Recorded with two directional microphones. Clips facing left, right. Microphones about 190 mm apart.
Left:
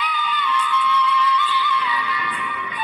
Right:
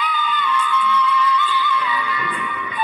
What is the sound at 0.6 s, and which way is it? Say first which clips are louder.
Music: right 1 dB; 50° right (ahead or behind).